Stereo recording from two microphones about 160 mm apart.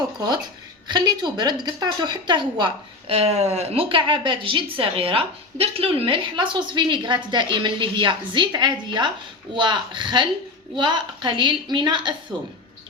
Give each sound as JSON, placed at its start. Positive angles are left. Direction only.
{"t": 0.9, "sound": "a woman's voice", "side_deg": -25}